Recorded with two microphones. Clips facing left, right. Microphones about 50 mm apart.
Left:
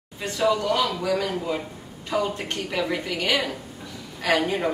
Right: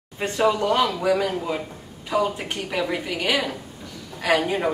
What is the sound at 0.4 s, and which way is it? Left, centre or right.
A woman's voice, right.